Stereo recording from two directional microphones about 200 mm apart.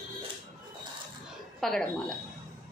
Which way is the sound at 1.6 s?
5° left (ahead or behind).